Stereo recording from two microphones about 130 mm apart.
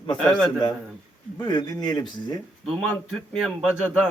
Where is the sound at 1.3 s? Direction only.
30° left (ahead or behind).